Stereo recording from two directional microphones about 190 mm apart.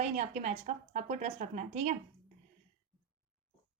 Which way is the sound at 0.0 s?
35° right (ahead or behind).